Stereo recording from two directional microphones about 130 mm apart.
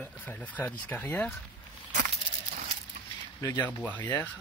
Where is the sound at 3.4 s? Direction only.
25° left (ahead or behind).